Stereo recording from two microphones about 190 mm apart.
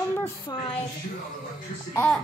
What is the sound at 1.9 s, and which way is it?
Speech, 5° left (ahead or behind).